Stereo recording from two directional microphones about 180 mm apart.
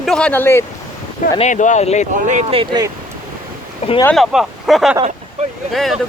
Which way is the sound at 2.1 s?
45° right (ahead or behind).